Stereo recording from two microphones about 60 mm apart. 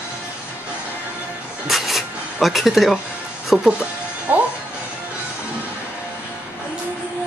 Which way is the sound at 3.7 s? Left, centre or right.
Right.